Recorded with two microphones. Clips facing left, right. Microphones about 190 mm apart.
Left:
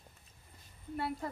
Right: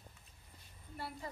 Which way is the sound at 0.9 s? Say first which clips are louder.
Left 8 dB; 60° left (ahead or behind).